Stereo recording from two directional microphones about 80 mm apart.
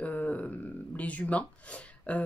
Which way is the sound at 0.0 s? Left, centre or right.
Centre.